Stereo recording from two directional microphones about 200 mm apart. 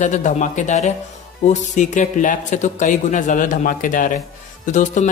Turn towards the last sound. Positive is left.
turn(degrees=40)  # may be behind; listen again after turning